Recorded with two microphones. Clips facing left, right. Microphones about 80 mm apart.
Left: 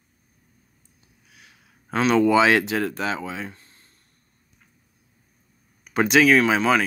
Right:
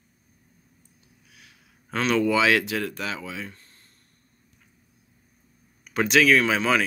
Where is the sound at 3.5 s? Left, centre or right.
Centre.